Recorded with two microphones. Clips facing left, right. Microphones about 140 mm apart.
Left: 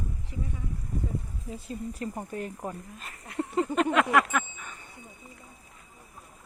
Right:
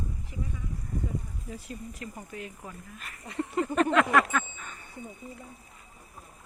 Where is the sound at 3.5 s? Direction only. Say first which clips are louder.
Even; 15° left (ahead or behind).